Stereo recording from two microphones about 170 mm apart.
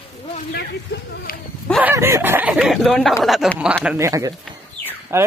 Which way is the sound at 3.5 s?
5° right (ahead or behind).